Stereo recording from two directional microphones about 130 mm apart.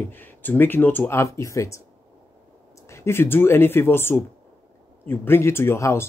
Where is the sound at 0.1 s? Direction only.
15° left (ahead or behind).